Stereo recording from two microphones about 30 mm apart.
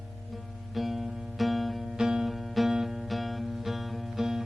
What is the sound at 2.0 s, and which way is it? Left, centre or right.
Music, centre.